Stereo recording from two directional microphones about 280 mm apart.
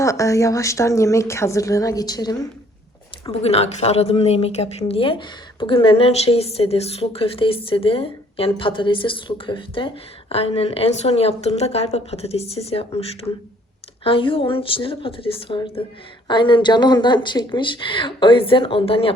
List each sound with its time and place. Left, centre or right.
0.0 s a woman's voice: centre